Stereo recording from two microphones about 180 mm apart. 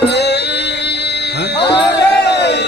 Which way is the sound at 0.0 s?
70° left (ahead or behind).